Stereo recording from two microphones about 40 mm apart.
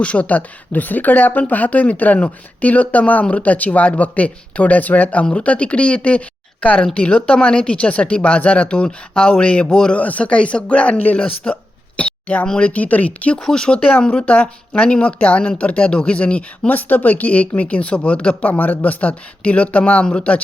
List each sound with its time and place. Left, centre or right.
0.0 s a man's voice: left
10.0 s speech: left
11.9 s a sound: left
12.5 s speech: left
13.4 s speech: centre
14.1 s speech: left
16.7 s speech: left
18.4 s speech: left